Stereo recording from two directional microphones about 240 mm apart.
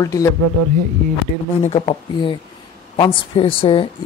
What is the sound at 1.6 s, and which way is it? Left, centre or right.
Speech, left.